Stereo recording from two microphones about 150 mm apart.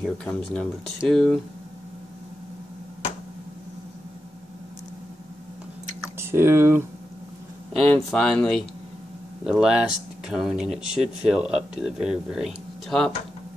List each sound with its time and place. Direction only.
0.0 s speech: 5° left (ahead or behind)
6.1 s speech: 15° right (ahead or behind)
7.7 s speech: 5° left (ahead or behind)